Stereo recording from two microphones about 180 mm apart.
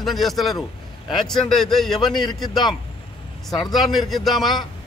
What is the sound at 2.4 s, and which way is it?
Speech, 25° left (ahead or behind).